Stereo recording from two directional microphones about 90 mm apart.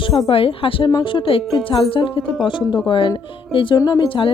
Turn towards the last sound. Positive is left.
turn(degrees=70)  # may be behind; listen again after turning